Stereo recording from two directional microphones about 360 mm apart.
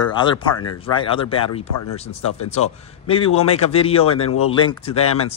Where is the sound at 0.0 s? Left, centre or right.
Centre.